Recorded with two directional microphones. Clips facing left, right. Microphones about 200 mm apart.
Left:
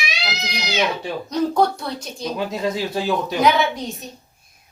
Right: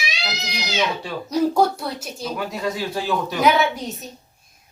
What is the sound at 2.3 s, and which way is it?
A man's voice, 20° left (ahead or behind).